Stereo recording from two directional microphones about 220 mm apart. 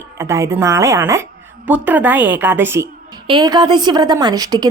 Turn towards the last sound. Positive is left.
turn(degrees=-15)  # may be behind; listen again after turning